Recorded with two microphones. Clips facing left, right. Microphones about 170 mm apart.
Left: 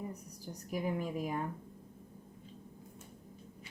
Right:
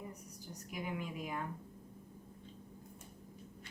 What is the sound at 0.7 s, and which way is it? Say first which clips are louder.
Speech: left 6 dB; 40° left (ahead or behind).